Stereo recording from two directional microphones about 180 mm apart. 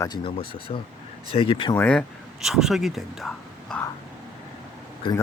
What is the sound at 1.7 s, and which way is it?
Speech, 5° left (ahead or behind).